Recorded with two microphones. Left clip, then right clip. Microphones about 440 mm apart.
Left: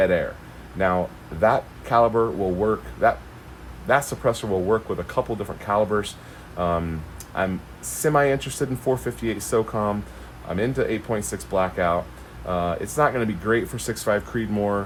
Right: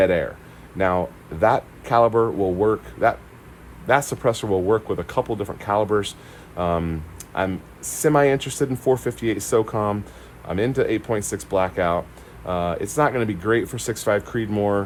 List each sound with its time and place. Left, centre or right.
0.0 s speech: centre